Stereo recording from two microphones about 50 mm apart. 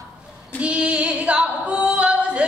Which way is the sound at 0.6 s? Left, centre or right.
Right.